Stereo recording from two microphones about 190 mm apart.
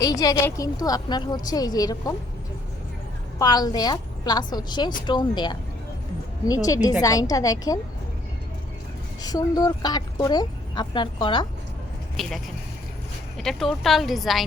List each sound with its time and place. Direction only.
0.0 s speech: 20° left (ahead or behind)
3.3 s a woman's voice: 20° left (ahead or behind)
9.2 s speech: 20° left (ahead or behind)
12.1 s a woman's voice: centre (ahead or behind)